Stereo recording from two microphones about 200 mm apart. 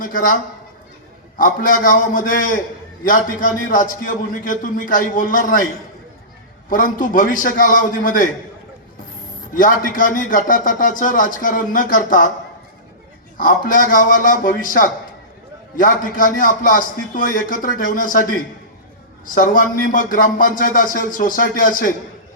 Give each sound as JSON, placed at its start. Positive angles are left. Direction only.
{"t": 0.0, "sound": "a man's voice", "side_deg": 40}
{"t": 1.4, "sound": "a man's voice", "side_deg": 40}
{"t": 6.7, "sound": "a man's voice", "side_deg": 45}
{"t": 9.5, "sound": "a man's voice", "side_deg": 45}
{"t": 13.3, "sound": "a man's voice", "side_deg": 40}